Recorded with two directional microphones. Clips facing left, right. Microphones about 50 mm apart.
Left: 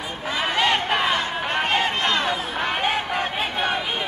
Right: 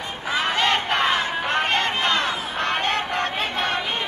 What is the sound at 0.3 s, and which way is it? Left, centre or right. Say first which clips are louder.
Crowd: even; centre.